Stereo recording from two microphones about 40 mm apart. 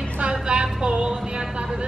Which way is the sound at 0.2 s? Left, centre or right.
Right.